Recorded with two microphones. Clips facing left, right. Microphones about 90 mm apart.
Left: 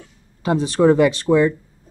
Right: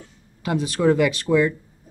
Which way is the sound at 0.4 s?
30° left (ahead or behind).